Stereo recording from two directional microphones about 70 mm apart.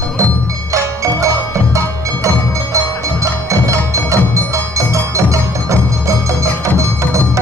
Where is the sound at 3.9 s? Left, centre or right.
Right.